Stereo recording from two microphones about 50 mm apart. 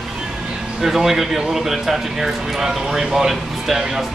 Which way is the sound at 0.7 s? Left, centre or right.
Centre.